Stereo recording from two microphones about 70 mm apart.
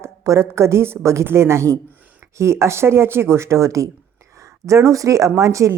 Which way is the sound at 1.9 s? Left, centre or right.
Right.